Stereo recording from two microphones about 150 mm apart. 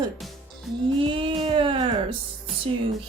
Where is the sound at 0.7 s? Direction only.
Centre (ahead or behind).